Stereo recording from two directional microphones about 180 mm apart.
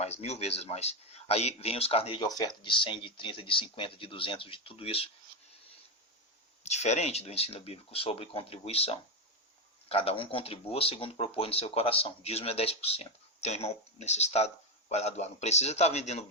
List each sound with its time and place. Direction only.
0.0 s speech: 35° left (ahead or behind)
2.2 s speech: 20° left (ahead or behind)
6.6 s speech: 40° left (ahead or behind)